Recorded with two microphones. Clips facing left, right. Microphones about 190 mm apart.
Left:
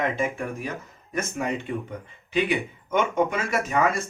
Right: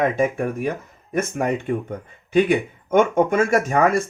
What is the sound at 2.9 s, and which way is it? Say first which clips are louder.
Speech: right 7 dB; 50° right (ahead or behind).